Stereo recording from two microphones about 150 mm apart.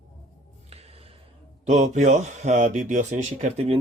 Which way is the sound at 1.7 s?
50° right (ahead or behind).